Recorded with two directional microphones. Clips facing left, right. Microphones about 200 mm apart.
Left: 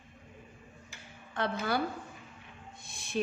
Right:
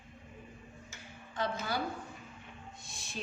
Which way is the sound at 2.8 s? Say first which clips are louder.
Left 5 dB; 60° left (ahead or behind).